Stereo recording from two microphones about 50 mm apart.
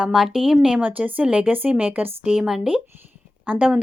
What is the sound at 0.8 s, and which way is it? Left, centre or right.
Speech, right.